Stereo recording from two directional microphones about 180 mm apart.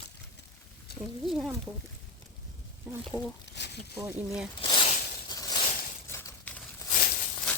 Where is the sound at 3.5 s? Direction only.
70° left (ahead or behind).